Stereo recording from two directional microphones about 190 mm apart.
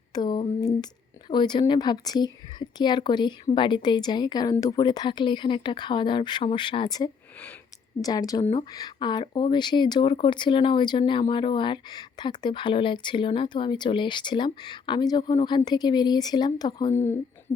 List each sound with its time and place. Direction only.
0.1 s speech: 25° left (ahead or behind)